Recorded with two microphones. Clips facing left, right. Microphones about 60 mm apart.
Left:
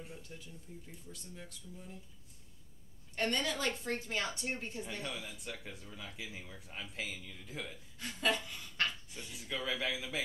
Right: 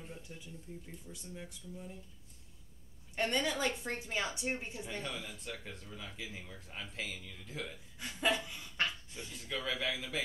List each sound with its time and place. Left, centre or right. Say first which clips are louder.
0.0 s speech: even; centre
0.7 s a woman's voice: right 2 dB; centre
3.2 s a woman's voice: right 1 dB; centre
4.8 s speech: right 1 dB; centre
8.0 s a woman's voice: right 1 dB; centre
9.1 s speech: right 1 dB; centre